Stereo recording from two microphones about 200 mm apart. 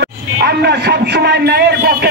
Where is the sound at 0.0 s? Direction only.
55° right (ahead or behind).